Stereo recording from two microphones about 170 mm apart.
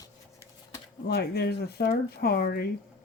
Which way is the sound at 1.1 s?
70° left (ahead or behind).